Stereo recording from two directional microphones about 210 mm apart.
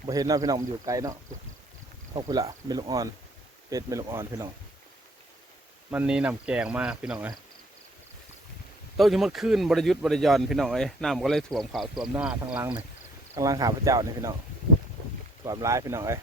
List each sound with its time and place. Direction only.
0.0 s speech: 15° right (ahead or behind)
2.1 s speech: 15° right (ahead or behind)
5.9 s a man's voice: 5° right (ahead or behind)
9.0 s a man's voice: centre (ahead or behind)
12.5 s speech: 20° right (ahead or behind)
15.4 s speech: 15° right (ahead or behind)